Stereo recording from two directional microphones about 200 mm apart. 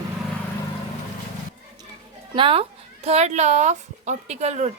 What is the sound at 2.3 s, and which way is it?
Speech, 25° right (ahead or behind).